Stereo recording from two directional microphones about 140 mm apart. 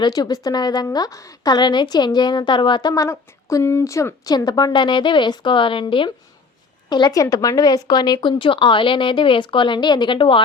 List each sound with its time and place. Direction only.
0.0 s a woman's voice: 30° left (ahead or behind)